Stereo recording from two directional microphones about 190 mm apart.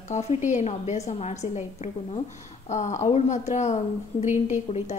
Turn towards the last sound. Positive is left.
turn(degrees=35)  # may be behind; listen again after turning